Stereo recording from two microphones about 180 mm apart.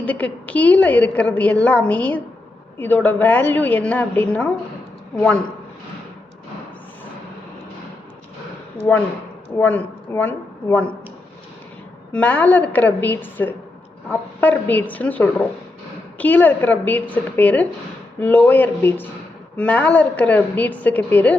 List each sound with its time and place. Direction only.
0.0 s a woman's voice: 10° left (ahead or behind)
9.6 s a woman's voice: 10° left (ahead or behind)
12.1 s a woman's voice: 10° left (ahead or behind)